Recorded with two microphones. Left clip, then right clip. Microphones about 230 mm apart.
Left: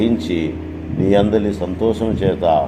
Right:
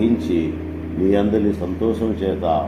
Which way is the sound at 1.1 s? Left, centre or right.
Left.